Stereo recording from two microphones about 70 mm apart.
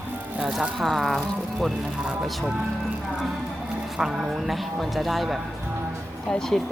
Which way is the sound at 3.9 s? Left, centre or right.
Centre.